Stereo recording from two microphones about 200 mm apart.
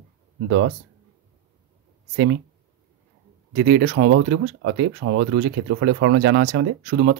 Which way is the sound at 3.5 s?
50° right (ahead or behind).